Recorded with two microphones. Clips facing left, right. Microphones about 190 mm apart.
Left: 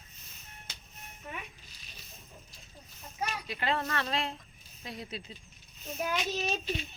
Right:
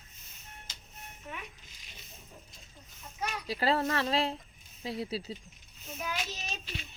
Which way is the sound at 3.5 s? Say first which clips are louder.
Right 6 dB; 35° right (ahead or behind).